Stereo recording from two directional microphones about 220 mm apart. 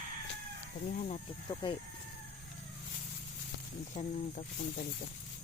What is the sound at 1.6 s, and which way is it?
Speech, 20° left (ahead or behind).